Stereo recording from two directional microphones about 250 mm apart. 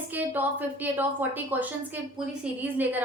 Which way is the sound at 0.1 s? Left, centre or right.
Centre.